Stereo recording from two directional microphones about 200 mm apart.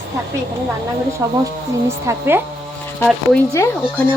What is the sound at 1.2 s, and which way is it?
A woman's voice, 15° right (ahead or behind).